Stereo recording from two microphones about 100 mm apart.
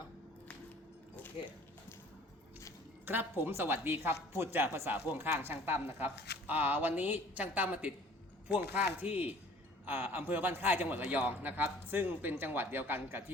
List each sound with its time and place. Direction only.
3.1 s a man's voice: 20° right (ahead or behind)